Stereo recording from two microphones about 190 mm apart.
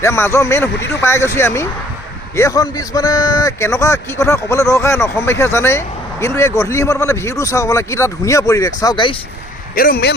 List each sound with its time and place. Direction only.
0.0 s a man's voice: 15° left (ahead or behind)
9.7 s speech: 50° left (ahead or behind)